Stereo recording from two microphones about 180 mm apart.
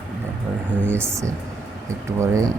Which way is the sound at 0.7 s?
10° right (ahead or behind).